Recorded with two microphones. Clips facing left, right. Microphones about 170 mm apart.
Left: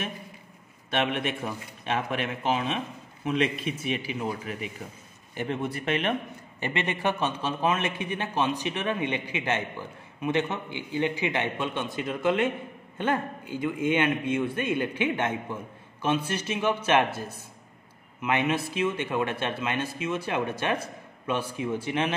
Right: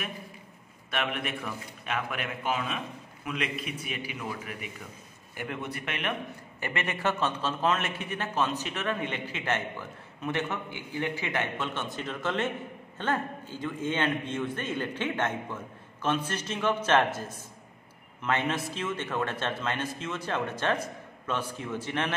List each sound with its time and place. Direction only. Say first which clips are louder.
0.8 s a man's voice: left 5 dB; 25° left (ahead or behind)
6.6 s a man's voice: left 3 dB; 20° left (ahead or behind)
18.2 s a man's voice: left 3 dB; 15° left (ahead or behind)